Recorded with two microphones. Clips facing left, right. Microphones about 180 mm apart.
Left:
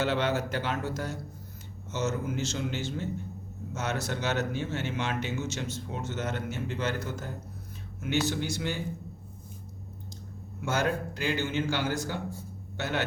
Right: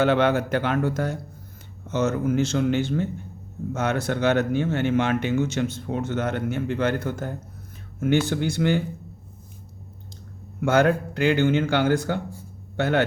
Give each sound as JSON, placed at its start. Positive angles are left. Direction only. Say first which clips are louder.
{"t": 0.0, "sound": "speech", "louder": "right 8 dB", "side_deg": -60}
{"t": 10.6, "sound": "speech", "louder": "right 9 dB", "side_deg": -60}